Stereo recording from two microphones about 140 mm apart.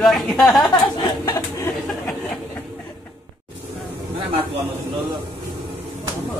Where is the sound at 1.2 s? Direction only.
25° left (ahead or behind).